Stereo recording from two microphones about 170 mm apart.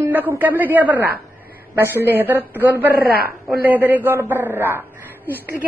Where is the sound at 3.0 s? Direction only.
65° left (ahead or behind).